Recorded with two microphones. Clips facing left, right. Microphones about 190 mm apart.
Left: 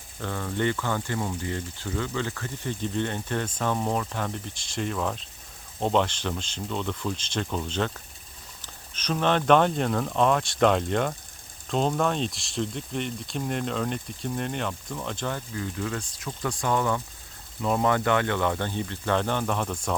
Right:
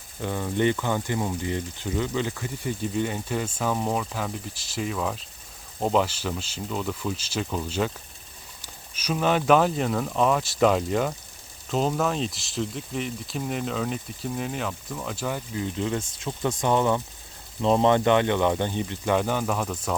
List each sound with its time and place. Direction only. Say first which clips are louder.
0.2 s speech: right 3 dB; 15° right (ahead or behind)